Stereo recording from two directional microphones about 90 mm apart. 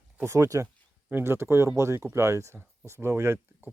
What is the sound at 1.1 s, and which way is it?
Speech, 30° right (ahead or behind).